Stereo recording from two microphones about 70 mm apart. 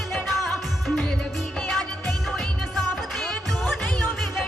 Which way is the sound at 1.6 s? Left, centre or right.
Centre.